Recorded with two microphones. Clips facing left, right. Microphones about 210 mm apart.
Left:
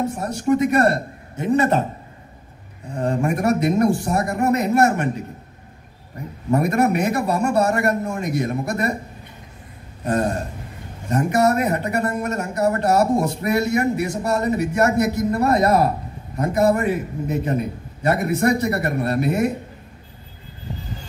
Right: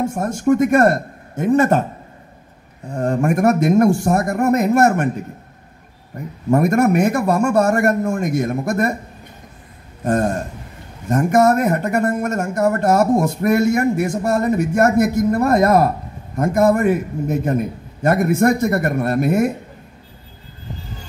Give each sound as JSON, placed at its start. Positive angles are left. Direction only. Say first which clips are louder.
{"t": 0.0, "sound": "speech", "louder": "right 4 dB", "side_deg": -50}
{"t": 2.9, "sound": "speech", "louder": "right 3 dB", "side_deg": -50}
{"t": 6.5, "sound": "speech", "louder": "right 4 dB", "side_deg": -50}
{"t": 10.0, "sound": "speech", "louder": "right 3 dB", "side_deg": -50}